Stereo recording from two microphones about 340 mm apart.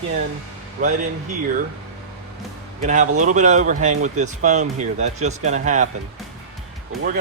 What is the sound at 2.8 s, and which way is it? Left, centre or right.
Speech, right.